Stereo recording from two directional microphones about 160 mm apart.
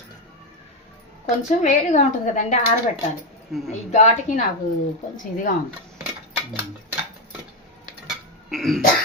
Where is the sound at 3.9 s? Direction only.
50° left (ahead or behind).